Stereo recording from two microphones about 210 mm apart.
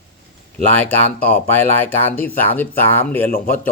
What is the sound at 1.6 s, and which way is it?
Speech, 10° left (ahead or behind).